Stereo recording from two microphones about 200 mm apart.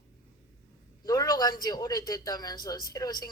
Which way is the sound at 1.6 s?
20° left (ahead or behind).